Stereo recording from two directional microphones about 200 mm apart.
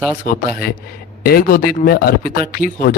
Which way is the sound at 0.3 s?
45° left (ahead or behind).